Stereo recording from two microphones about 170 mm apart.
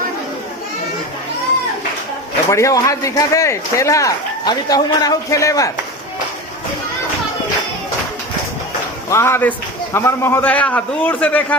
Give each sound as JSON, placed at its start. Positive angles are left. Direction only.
{"t": 2.5, "sound": "a man's voice", "side_deg": 15}
{"t": 9.0, "sound": "a man's voice", "side_deg": 15}